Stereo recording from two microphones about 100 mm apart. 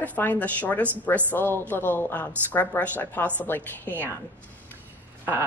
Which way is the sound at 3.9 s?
20° right (ahead or behind).